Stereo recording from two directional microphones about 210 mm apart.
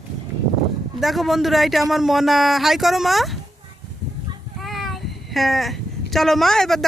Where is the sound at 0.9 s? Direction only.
Centre (ahead or behind).